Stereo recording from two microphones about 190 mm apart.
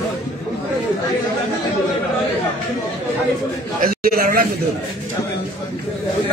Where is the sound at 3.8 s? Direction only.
50° right (ahead or behind).